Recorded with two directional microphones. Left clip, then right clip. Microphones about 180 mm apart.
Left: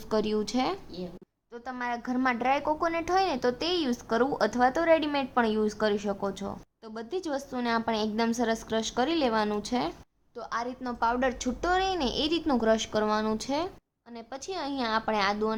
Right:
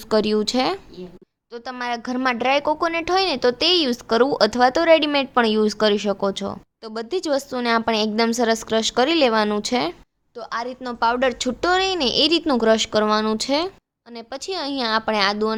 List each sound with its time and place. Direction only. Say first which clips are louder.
0.1 s a woman's voice: right 9 dB; 35° right (ahead or behind)
10.3 s a woman's voice: right 6 dB; 25° right (ahead or behind)